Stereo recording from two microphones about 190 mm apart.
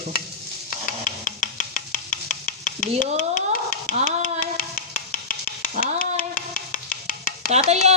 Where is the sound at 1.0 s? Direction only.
40° left (ahead or behind).